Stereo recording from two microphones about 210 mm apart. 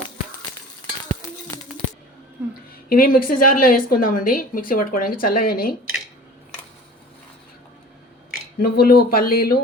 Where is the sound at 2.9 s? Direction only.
45° left (ahead or behind).